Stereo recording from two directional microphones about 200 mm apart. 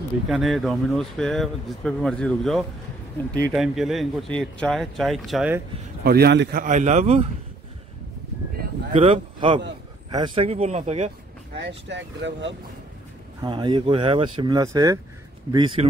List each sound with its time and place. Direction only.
0.3 s speech: centre (ahead or behind)
6.0 s a man's voice: 55° right (ahead or behind)
6.6 s speech: 40° right (ahead or behind)
8.9 s speech: 25° right (ahead or behind)
11.5 s speech: 65° right (ahead or behind)
13.4 s speech: 20° right (ahead or behind)